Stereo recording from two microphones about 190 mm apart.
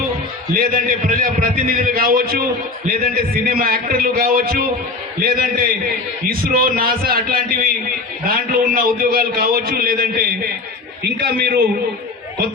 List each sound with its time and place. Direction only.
0.5 s a man's voice: 50° right (ahead or behind)